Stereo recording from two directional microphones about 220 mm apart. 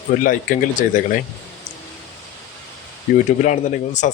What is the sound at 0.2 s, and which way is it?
A man's voice, 40° left (ahead or behind).